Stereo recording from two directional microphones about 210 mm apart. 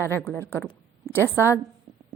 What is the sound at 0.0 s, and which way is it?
A woman's voice, 10° left (ahead or behind).